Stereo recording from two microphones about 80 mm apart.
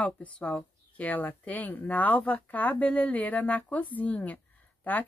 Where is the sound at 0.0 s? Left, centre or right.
Centre.